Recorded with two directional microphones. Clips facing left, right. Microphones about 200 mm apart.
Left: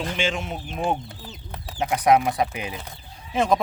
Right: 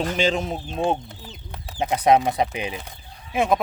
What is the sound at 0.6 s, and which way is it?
Speech, 20° right (ahead or behind).